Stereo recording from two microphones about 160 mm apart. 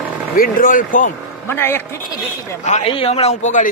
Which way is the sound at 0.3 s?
60° left (ahead or behind).